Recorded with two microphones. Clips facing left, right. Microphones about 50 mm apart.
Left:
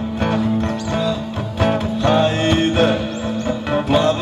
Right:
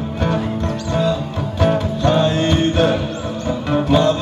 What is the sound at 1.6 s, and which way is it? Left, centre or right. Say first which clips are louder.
Music: right 1 dB; centre.